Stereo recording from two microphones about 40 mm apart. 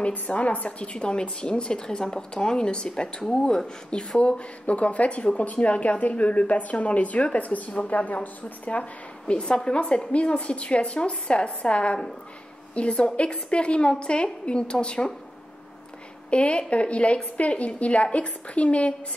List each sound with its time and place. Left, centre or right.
0.3 s a woman's voice: left
4.4 s a woman's voice: left
9.3 s a woman's voice: left
16.3 s a woman's voice: left